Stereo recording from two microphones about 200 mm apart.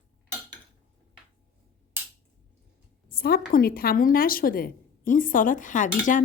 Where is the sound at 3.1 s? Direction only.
50° left (ahead or behind).